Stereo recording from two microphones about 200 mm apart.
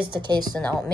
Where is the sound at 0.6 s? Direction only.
5° left (ahead or behind).